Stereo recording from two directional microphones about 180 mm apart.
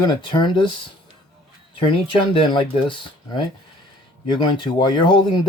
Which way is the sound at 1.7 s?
30° left (ahead or behind).